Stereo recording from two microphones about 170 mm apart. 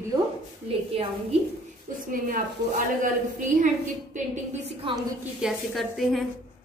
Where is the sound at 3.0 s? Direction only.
50° right (ahead or behind).